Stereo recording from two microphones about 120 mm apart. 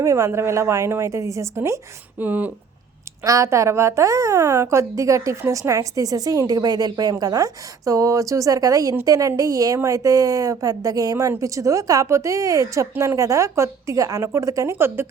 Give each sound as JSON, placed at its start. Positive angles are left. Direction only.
{"t": 0.0, "sound": "a woman's voice", "side_deg": -25}
{"t": 3.2, "sound": "a woman's voice", "side_deg": -25}